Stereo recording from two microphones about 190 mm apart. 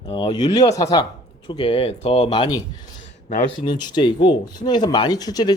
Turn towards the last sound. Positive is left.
turn(degrees=20)  # may be behind; listen again after turning